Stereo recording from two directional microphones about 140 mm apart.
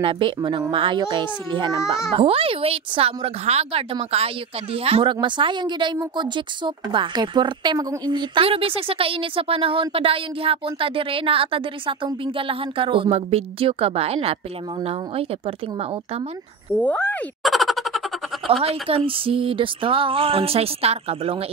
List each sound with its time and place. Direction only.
0.0 s a woman's voice: 35° right (ahead or behind)
16.7 s speech: 10° left (ahead or behind)
17.4 s a sound: centre (ahead or behind)
18.5 s a woman's voice: 45° right (ahead or behind)